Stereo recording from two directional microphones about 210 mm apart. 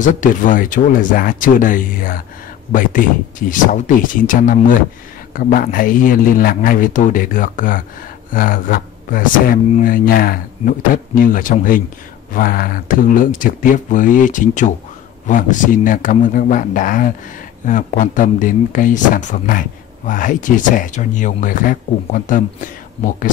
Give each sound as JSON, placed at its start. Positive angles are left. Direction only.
{"t": 0.0, "sound": "speech", "side_deg": 40}